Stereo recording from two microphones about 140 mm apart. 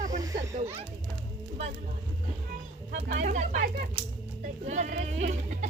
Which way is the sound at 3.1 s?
60° right (ahead or behind).